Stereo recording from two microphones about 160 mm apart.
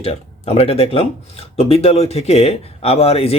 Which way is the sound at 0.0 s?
40° left (ahead or behind).